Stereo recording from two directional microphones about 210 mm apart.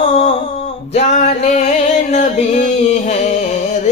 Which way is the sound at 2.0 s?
35° left (ahead or behind).